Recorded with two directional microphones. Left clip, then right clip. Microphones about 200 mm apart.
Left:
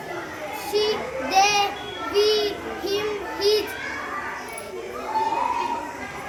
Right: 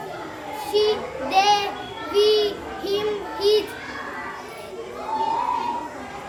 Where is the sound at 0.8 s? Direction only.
Centre (ahead or behind).